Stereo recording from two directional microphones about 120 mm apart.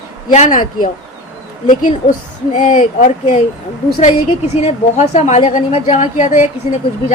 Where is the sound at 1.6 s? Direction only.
90° left.